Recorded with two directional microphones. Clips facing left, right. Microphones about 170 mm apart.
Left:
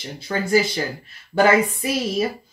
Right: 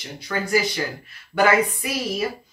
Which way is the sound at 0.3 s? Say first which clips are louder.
Left 3 dB; 25° left (ahead or behind).